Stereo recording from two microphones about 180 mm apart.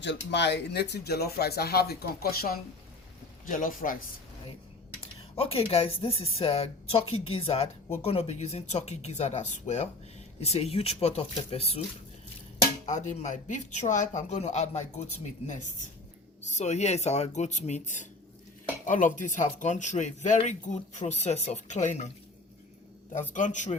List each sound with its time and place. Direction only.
0.0 s a man's voice: 75° left (ahead or behind); by 3.9 s 50° left (ahead or behind)
5.4 s speech: 30° left (ahead or behind)
12.8 s speech: 40° left (ahead or behind)
23.3 s a man's voice: 45° left (ahead or behind)